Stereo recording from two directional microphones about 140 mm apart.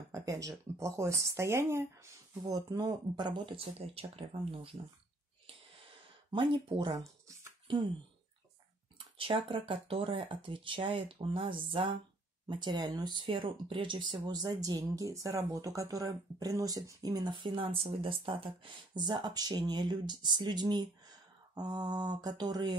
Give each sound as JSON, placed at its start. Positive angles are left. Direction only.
{"t": 0.1, "sound": "speech", "side_deg": -25}
{"t": 6.3, "sound": "speech", "side_deg": -35}
{"t": 8.9, "sound": "speech", "side_deg": -40}